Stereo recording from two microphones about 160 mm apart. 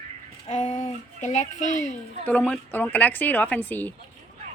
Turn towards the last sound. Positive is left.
turn(degrees=10)  # may be behind; listen again after turning